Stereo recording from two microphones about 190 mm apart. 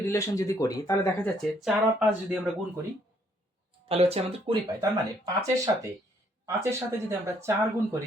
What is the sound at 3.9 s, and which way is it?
Speech, 30° right (ahead or behind).